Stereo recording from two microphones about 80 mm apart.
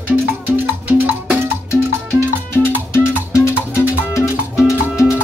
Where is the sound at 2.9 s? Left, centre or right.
Left.